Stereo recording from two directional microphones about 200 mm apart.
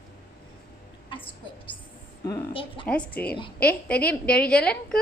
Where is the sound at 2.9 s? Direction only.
5° left (ahead or behind).